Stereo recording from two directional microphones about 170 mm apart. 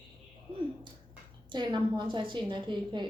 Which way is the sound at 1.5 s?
25° right (ahead or behind).